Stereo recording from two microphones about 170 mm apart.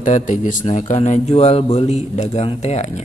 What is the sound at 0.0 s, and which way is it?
Speech, 50° left (ahead or behind).